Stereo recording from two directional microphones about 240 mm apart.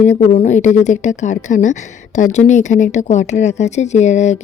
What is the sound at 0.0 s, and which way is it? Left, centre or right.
A woman's voice, left.